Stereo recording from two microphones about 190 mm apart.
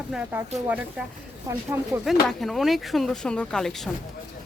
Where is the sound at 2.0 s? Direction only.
Centre (ahead or behind).